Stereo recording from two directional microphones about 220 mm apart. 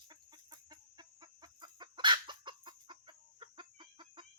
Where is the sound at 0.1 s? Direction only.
20° right (ahead or behind).